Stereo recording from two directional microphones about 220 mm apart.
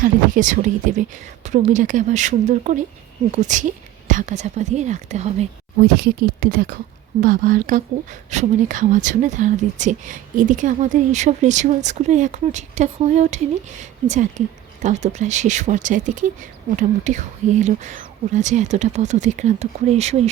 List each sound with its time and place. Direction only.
0.0 s speech: 35° right (ahead or behind)
5.8 s speech: 45° right (ahead or behind)